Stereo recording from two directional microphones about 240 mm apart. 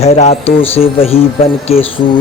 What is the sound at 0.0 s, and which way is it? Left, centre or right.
Speech, left.